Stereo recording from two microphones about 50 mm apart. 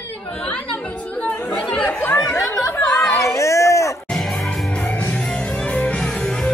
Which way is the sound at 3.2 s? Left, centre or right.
Left.